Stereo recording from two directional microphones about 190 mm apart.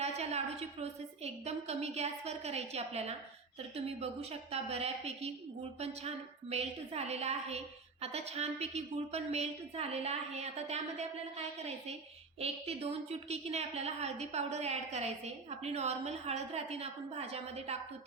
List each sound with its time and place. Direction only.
0.0 s a woman's voice: 35° right (ahead or behind)
6.5 s a woman's voice: 35° right (ahead or behind)